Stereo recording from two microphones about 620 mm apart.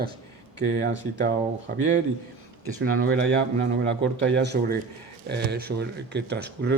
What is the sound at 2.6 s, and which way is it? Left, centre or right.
Speech, right.